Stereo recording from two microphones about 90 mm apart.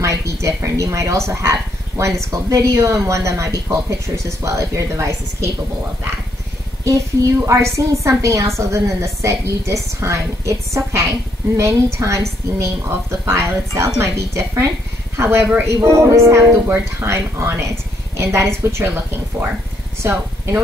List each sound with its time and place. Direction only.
0.0 s speech: 35° right (ahead or behind)
7.4 s speech: 35° right (ahead or behind)
20.0 s speech: 30° right (ahead or behind)